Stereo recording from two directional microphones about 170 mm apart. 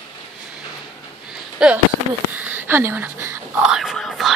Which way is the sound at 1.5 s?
5° right (ahead or behind).